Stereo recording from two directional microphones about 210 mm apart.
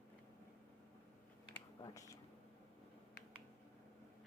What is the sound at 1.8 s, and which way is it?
Speech, 15° left (ahead or behind).